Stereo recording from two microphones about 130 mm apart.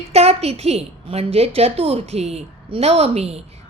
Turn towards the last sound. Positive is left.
turn(degrees=-50)  # may be behind; listen again after turning